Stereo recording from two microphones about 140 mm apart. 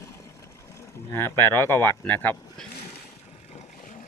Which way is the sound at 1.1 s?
15° left (ahead or behind).